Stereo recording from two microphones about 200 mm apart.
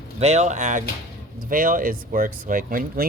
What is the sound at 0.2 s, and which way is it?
Speech, 35° right (ahead or behind).